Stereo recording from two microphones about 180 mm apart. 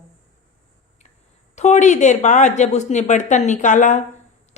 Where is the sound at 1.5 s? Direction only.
40° left (ahead or behind).